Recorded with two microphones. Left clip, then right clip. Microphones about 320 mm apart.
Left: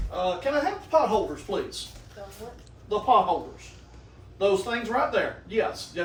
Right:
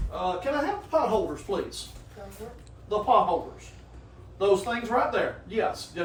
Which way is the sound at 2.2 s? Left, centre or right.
Centre.